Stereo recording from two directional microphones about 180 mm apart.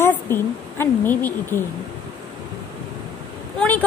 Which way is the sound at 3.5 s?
10° left (ahead or behind).